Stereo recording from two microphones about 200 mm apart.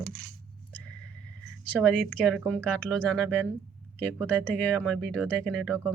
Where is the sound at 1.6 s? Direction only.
5° left (ahead or behind).